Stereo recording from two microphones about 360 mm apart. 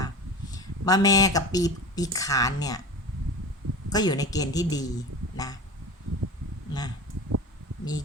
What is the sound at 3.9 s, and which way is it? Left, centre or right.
Speech, centre.